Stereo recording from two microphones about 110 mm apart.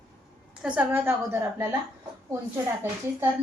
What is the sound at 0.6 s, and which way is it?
Speech, 10° right (ahead or behind).